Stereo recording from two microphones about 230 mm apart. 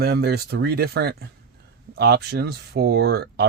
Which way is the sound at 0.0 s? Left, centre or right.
Right.